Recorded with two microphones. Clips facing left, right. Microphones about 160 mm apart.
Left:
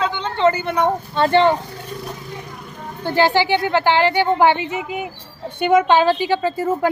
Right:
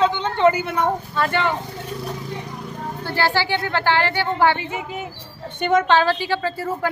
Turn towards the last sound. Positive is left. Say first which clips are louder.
# left 5 dB
turn(degrees=20)  # may be behind; listen again after turning